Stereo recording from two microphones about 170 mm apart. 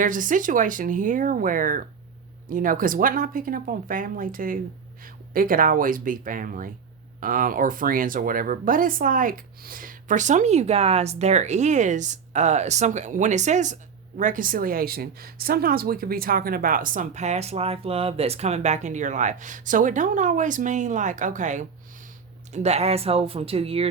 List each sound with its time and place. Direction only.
0.0 s speech: 50° right (ahead or behind); by 23.9 s 35° right (ahead or behind)